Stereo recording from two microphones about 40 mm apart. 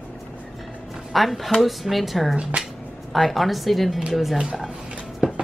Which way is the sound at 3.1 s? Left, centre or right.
Centre.